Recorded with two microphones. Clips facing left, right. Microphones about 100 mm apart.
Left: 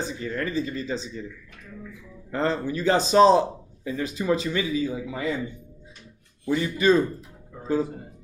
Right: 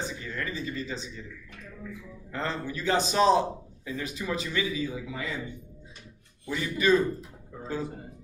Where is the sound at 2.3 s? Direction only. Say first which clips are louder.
Left 7 dB; 40° left (ahead or behind).